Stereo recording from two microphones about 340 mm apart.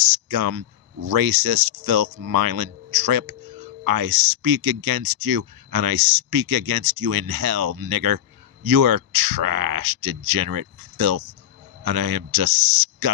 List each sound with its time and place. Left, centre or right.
0.0 s speech: right